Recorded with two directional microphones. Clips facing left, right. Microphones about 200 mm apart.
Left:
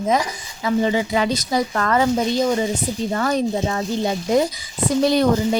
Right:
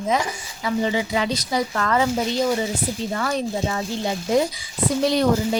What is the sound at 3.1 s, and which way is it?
Speech, 45° left (ahead or behind).